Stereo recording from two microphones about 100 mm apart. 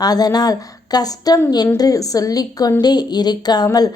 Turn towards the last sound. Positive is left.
turn(degrees=45)  # may be behind; listen again after turning